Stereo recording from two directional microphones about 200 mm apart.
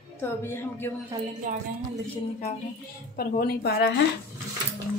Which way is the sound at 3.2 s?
50° left (ahead or behind).